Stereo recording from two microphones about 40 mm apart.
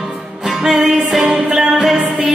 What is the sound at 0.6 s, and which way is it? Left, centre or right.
Music, centre.